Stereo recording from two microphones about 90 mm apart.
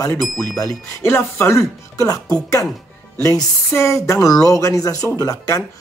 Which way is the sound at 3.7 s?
30° left (ahead or behind).